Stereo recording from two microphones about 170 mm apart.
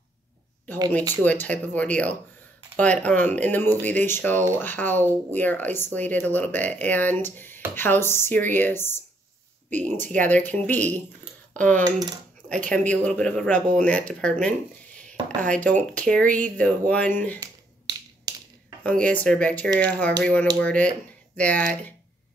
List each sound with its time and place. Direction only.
1.2 s speech: 10° left (ahead or behind)
9.7 s speech: 45° right (ahead or behind)
10.0 s speech: 10° left (ahead or behind)
11.8 s cutlery: 25° right (ahead or behind)
12.6 s speech: 10° left (ahead or behind)
15.0 s a sound: 5° left (ahead or behind)
15.9 s speech: 5° left (ahead or behind)
17.4 s finger snapping: 20° right (ahead or behind)
18.9 s speech: 10° left (ahead or behind)